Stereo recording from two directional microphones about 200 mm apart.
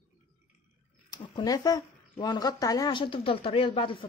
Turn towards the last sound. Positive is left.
turn(degrees=25)  # may be behind; listen again after turning